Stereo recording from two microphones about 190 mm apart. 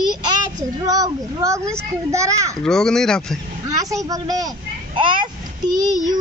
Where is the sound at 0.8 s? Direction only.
20° right (ahead or behind).